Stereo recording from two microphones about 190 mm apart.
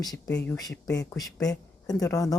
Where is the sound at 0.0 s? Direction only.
20° left (ahead or behind).